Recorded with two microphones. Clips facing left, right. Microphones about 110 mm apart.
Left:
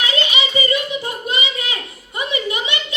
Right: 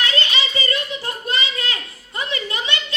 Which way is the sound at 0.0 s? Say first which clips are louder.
Left 2 dB; 15° left (ahead or behind).